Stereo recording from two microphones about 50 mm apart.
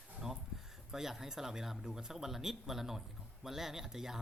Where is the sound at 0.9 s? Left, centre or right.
Centre.